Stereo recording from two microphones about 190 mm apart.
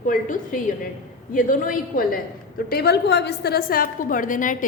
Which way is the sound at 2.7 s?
60° left (ahead or behind).